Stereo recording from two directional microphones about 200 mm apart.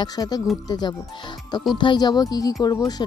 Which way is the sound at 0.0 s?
20° left (ahead or behind).